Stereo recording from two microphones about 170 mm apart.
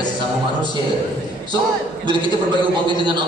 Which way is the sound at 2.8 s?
25° right (ahead or behind).